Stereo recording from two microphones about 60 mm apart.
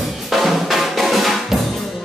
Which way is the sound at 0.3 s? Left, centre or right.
Centre.